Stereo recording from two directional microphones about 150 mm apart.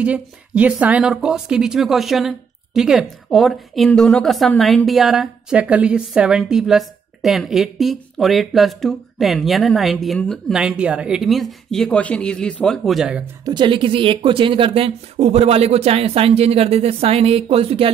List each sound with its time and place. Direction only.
0.0 s a woman's voice: 10° right (ahead or behind)
13.5 s speech: 30° right (ahead or behind)